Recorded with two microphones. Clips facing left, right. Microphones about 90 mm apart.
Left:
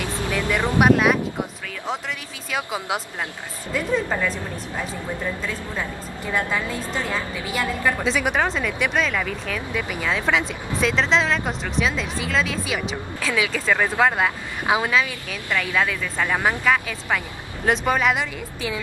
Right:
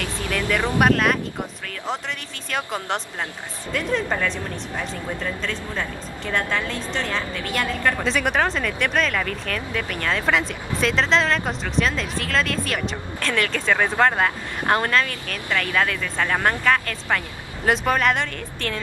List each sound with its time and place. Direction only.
0.0 s vehicle: 15° left (ahead or behind)
0.7 s speech: 5° left (ahead or behind)
2.5 s speech: 5° left (ahead or behind)